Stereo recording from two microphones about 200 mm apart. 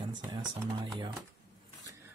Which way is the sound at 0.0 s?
20° right (ahead or behind).